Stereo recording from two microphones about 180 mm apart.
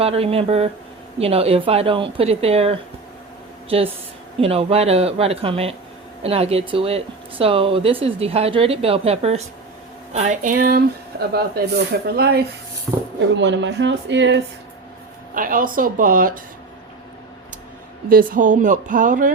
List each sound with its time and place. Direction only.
0.0 s speech: 35° right (ahead or behind)
4.4 s speech: 35° right (ahead or behind); by 12.5 s 60° right (ahead or behind)
13.3 s speech: 80° right
15.4 s speech: 50° right (ahead or behind)
18.1 s speech: 50° right (ahead or behind)